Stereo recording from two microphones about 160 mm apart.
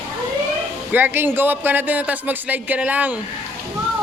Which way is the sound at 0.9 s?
10° right (ahead or behind).